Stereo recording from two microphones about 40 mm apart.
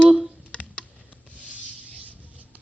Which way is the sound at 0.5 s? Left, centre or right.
Left.